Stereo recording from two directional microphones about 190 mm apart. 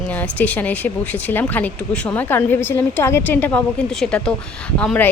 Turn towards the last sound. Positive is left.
turn(degrees=5)  # may be behind; listen again after turning